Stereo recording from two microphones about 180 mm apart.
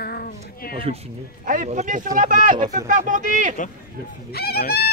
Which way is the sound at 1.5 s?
45° right (ahead or behind).